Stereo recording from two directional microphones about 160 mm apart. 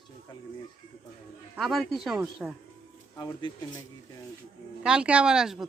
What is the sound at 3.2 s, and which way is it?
Speech, 25° left (ahead or behind).